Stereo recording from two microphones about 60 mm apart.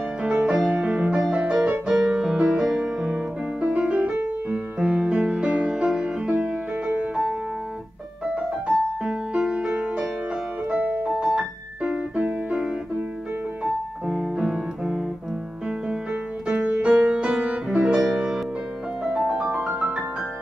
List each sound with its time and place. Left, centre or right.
0.2 s music: centre
8.4 s music: centre
10.7 s piano: right
14.0 s piano: centre
15.9 s music: centre
19.7 s music: right